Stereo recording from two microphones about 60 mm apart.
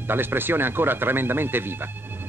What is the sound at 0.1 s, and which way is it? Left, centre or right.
Speech, right.